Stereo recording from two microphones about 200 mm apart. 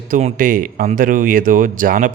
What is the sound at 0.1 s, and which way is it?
A man's voice, 35° right (ahead or behind).